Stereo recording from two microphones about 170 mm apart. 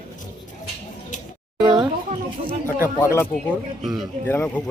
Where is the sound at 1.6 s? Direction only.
30° right (ahead or behind).